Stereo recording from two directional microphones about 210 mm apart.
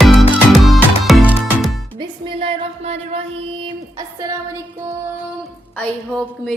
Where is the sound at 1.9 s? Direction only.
25° right (ahead or behind).